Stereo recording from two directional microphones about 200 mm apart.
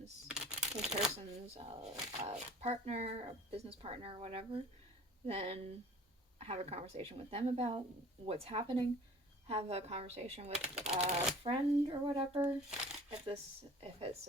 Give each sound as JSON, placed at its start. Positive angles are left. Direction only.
{"t": 0.3, "sound": "crumpling", "side_deg": -5}
{"t": 1.1, "sound": "speech", "side_deg": -30}